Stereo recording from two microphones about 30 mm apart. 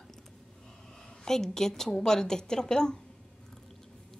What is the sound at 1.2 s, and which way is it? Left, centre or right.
A woman's voice, centre.